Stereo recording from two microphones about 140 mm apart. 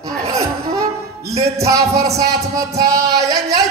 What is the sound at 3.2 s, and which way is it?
Yodeling, 25° right (ahead or behind).